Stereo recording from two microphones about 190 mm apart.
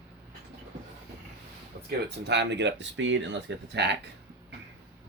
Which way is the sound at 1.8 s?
60° right (ahead or behind).